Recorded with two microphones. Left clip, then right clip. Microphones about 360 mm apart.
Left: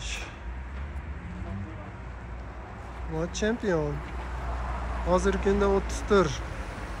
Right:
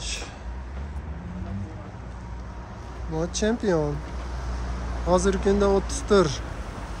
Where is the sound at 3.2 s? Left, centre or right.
Centre.